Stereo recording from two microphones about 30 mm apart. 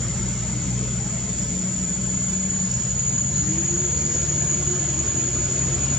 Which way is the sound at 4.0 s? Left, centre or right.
Centre.